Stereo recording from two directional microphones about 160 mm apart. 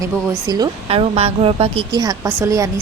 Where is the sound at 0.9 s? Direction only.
40° right (ahead or behind).